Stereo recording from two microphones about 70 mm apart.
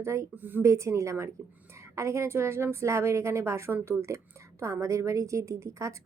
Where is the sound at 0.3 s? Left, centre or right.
Right.